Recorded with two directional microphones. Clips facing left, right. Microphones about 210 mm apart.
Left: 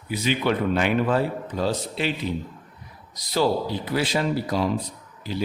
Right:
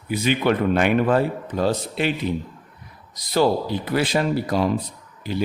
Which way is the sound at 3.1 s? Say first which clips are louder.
Right 3 dB; 55° right (ahead or behind).